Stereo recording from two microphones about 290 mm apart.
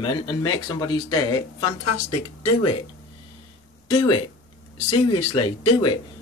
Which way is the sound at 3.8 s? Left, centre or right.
Centre.